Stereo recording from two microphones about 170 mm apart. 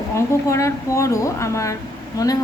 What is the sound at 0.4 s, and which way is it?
A woman's voice, 15° left (ahead or behind).